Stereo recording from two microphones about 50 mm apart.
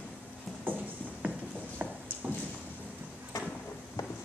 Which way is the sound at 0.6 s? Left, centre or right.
Right.